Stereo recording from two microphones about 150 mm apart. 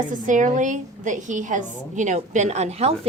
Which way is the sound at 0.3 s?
55° right (ahead or behind).